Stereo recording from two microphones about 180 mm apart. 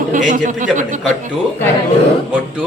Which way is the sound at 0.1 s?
45° right (ahead or behind).